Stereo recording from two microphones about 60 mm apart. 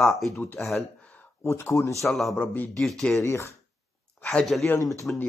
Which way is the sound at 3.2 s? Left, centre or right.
Left.